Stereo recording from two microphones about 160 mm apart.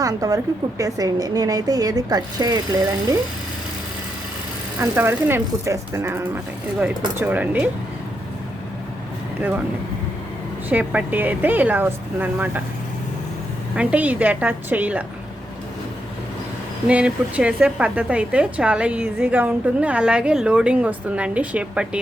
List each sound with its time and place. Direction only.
0.0 s a woman's voice: 20° right (ahead or behind)
4.8 s speech: 15° right (ahead or behind)
10.7 s speech: 10° right (ahead or behind)
13.7 s speech: 10° right (ahead or behind)
16.8 s speech: 5° right (ahead or behind)